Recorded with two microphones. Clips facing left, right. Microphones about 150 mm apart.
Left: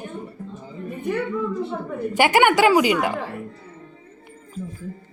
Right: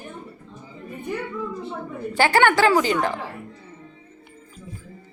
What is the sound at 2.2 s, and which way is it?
Speech, 15° left (ahead or behind).